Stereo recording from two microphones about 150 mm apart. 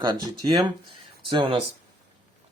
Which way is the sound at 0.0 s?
25° right (ahead or behind).